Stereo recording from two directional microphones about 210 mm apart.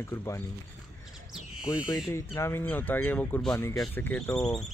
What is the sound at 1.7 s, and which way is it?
A man's voice, 15° left (ahead or behind).